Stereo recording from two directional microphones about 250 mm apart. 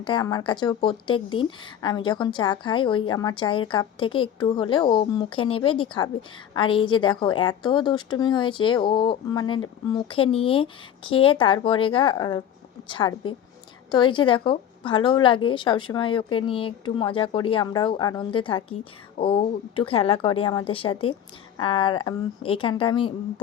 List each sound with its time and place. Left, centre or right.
0.0 s speech: centre